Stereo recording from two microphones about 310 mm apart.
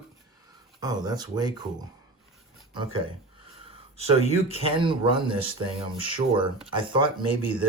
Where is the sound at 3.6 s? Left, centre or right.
Centre.